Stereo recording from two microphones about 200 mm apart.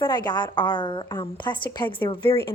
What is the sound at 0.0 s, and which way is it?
A woman's voice, 20° left (ahead or behind).